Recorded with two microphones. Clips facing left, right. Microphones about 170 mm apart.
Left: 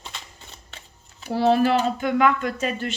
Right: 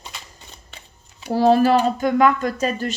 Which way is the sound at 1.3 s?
40° right (ahead or behind).